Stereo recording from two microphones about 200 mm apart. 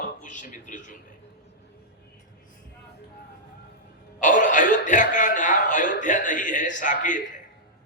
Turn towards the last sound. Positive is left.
turn(degrees=40)  # may be behind; listen again after turning